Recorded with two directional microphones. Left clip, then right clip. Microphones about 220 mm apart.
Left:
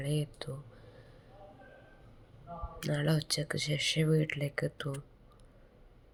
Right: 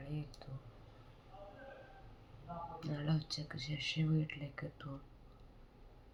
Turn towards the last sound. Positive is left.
turn(degrees=40)  # may be behind; listen again after turning